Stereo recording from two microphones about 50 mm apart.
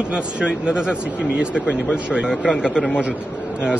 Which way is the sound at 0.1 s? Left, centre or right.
Centre.